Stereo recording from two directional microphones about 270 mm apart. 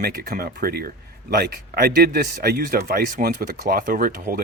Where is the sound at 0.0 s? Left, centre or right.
Right.